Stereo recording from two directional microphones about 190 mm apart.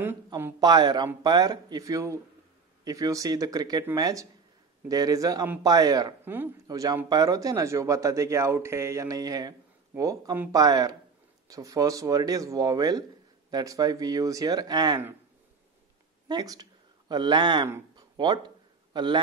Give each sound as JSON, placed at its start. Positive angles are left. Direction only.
{"t": 0.6, "sound": "speech", "side_deg": -20}
{"t": 16.3, "sound": "speech", "side_deg": -20}